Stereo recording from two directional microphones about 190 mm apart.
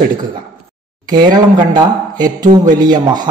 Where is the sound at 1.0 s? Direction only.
20° right (ahead or behind).